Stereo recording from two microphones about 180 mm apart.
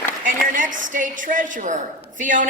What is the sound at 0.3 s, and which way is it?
A woman's voice, 45° right (ahead or behind).